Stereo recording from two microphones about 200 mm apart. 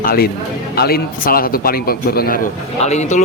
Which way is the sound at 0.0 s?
50° left (ahead or behind).